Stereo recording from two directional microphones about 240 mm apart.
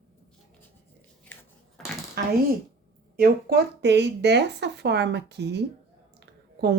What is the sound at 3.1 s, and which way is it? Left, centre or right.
Speech, right.